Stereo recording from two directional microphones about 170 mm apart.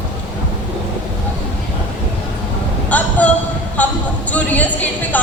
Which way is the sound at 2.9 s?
10° left (ahead or behind).